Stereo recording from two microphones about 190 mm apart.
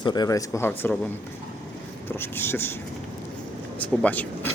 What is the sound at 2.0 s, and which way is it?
Speech, 10° left (ahead or behind).